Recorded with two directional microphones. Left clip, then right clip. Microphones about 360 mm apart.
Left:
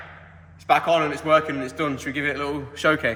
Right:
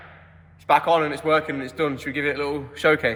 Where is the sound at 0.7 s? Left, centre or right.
Right.